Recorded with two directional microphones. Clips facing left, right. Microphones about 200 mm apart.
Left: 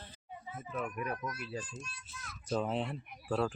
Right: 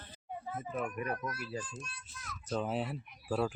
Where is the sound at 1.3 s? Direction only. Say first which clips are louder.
Right 1 dB; centre (ahead or behind).